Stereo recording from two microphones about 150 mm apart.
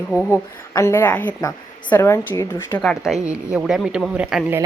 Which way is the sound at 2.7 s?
5° left (ahead or behind).